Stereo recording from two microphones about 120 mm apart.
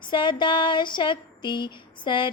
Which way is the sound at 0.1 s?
40° left (ahead or behind).